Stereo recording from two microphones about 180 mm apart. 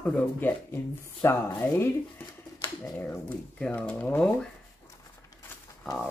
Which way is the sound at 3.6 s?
5° left (ahead or behind).